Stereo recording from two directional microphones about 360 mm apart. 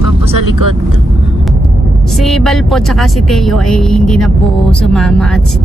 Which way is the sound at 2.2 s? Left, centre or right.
Centre.